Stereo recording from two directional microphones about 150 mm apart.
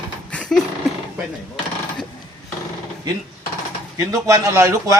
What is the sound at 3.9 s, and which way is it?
A man's voice, 20° right (ahead or behind).